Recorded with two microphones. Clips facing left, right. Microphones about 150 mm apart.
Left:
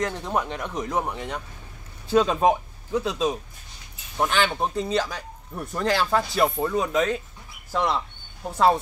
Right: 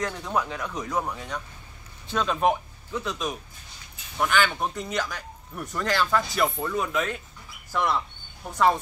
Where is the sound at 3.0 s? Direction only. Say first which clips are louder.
Left 6 dB; 25° left (ahead or behind).